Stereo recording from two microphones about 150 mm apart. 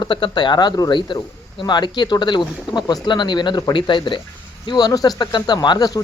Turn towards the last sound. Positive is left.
turn(degrees=25)  # may be behind; listen again after turning